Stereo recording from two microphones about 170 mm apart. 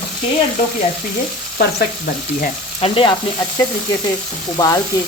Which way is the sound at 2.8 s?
35° left (ahead or behind).